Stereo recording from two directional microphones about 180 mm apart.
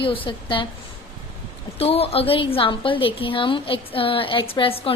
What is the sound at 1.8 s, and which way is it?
A woman's voice, 35° left (ahead or behind).